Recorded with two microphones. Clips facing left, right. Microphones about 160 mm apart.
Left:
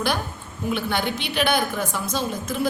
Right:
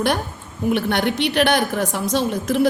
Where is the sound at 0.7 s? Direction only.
60° right (ahead or behind).